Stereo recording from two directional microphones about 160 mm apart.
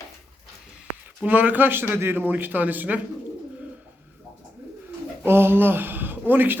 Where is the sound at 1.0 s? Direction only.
10° right (ahead or behind).